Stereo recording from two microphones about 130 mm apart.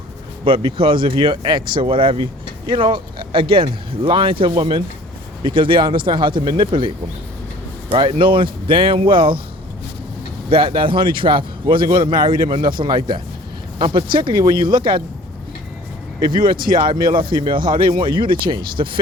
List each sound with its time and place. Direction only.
0.4 s speech: 40° right (ahead or behind)
7.9 s speech: 40° right (ahead or behind)
10.5 s speech: 45° right (ahead or behind)
16.7 s speech: 40° right (ahead or behind)